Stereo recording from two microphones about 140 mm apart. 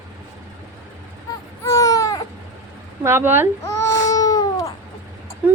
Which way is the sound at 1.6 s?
25° left (ahead or behind).